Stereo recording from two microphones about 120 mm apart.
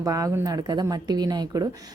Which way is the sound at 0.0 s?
25° right (ahead or behind).